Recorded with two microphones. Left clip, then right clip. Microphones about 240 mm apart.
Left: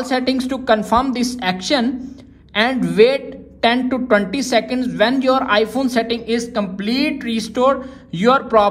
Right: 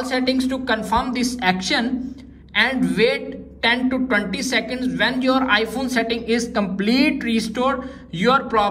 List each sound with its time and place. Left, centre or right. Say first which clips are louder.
0.0 s a woman's voice: left 2 dB; left